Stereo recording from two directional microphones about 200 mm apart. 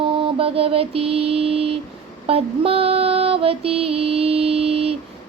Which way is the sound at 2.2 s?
30° right (ahead or behind).